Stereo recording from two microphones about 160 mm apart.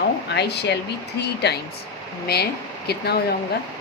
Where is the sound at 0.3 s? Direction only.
90° left.